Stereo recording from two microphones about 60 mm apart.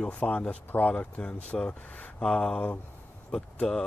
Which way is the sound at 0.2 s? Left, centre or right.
Left.